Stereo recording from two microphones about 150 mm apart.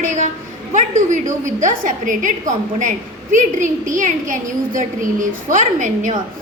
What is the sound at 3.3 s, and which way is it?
A woman's voice, 60° right (ahead or behind).